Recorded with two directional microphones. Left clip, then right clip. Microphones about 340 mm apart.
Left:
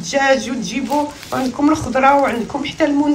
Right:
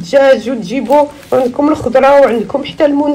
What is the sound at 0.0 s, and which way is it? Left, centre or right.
A woman's voice, centre.